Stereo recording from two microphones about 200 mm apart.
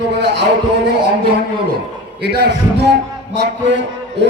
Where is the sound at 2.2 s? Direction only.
55° right (ahead or behind).